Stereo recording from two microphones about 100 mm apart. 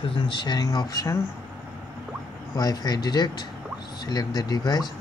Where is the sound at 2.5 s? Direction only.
40° left (ahead or behind).